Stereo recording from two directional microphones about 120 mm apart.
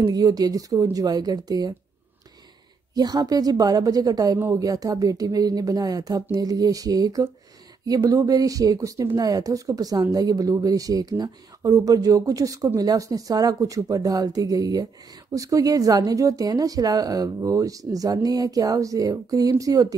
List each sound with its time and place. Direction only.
0.0 s speech: 30° right (ahead or behind)
2.9 s speech: 35° right (ahead or behind)